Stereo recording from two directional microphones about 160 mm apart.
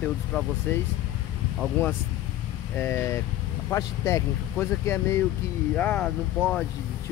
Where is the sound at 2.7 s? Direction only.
15° left (ahead or behind).